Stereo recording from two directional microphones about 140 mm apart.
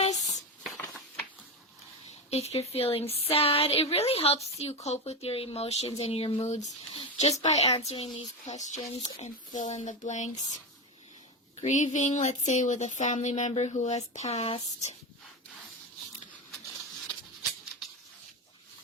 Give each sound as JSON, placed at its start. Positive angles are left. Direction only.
{"t": 2.3, "sound": "speech", "side_deg": 50}
{"t": 6.9, "sound": "a sound", "side_deg": 50}
{"t": 7.4, "sound": "speech", "side_deg": 50}
{"t": 11.6, "sound": "speech", "side_deg": 60}